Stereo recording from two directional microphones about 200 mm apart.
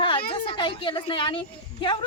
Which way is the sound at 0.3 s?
25° left (ahead or behind).